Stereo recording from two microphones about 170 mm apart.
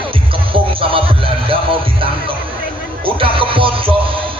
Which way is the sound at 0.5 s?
30° right (ahead or behind).